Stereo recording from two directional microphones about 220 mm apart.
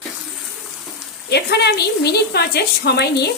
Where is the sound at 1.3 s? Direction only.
50° left (ahead or behind).